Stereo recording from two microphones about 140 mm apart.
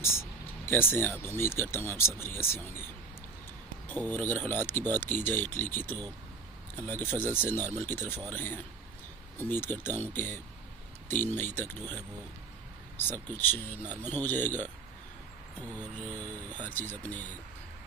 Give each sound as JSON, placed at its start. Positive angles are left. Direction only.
{"t": 0.0, "sound": "a sound", "side_deg": 15}
{"t": 1.2, "sound": "speech", "side_deg": 15}
{"t": 4.1, "sound": "speech", "side_deg": 15}
{"t": 16.0, "sound": "speech", "side_deg": 10}